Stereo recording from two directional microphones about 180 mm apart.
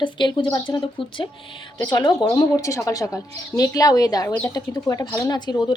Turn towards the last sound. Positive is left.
turn(degrees=20)  # may be behind; listen again after turning